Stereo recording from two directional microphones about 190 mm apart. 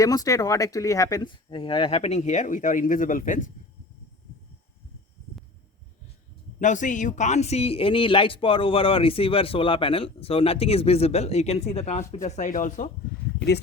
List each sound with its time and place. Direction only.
0.0 s speech: 20° left (ahead or behind); by 3.5 s 45° left (ahead or behind)
6.6 s a man's voice: 40° left (ahead or behind)